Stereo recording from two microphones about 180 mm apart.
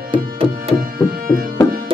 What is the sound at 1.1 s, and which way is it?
Music, 55° right (ahead or behind).